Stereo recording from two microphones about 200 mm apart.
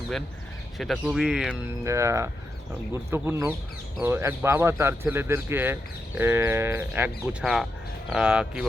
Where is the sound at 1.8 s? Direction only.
15° right (ahead or behind).